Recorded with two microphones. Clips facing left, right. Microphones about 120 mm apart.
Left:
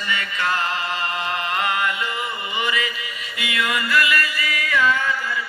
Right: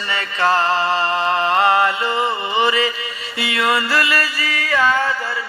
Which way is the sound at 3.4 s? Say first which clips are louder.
Right 5 dB; 30° right (ahead or behind).